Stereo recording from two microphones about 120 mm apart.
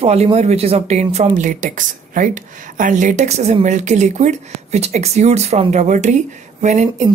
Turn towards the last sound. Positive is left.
turn(degrees=-80)